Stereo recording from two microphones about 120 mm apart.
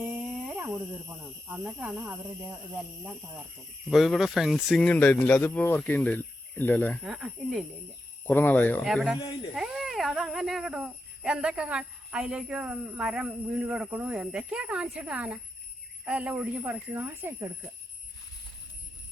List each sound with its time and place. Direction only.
0.0 s dog: 15° right (ahead or behind)
1.1 s speech: 10° right (ahead or behind)
3.0 s speech: 15° right (ahead or behind)
3.8 s speech: centre (ahead or behind)
4.8 s speech: 10° left (ahead or behind)
7.0 s speech: centre (ahead or behind)
8.2 s speech: 15° left (ahead or behind)
8.8 s speech: centre (ahead or behind); by 17.5 s 20° right (ahead or behind)